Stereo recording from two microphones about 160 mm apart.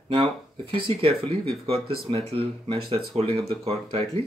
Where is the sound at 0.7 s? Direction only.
35° right (ahead or behind).